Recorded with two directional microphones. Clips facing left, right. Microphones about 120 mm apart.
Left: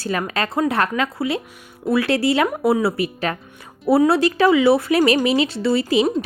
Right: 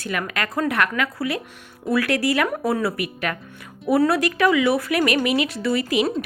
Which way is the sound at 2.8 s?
30° left (ahead or behind).